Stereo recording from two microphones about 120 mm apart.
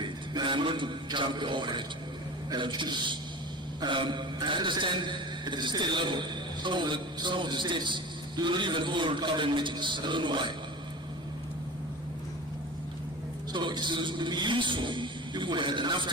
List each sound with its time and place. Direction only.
0.0 s a man's voice: 40° right (ahead or behind)
13.5 s a man's voice: 40° right (ahead or behind)